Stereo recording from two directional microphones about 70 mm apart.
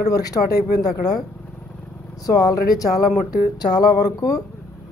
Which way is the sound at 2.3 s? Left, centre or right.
Left.